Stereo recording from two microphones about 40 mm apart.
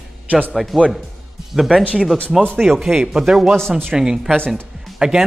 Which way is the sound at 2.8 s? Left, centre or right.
Centre.